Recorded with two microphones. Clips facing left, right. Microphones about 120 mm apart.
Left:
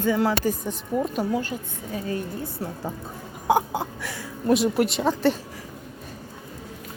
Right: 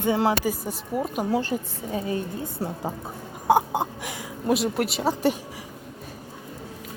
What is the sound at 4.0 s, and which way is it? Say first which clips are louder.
Speech: even; 20° right (ahead or behind).